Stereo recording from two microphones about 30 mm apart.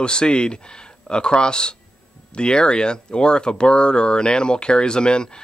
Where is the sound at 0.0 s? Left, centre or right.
Left.